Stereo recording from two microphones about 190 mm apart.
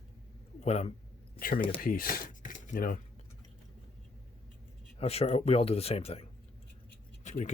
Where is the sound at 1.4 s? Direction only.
50° left (ahead or behind).